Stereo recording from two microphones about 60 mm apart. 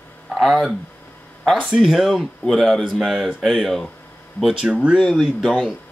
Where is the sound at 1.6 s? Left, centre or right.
Centre.